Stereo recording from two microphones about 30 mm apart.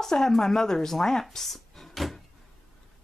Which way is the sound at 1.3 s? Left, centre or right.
Centre.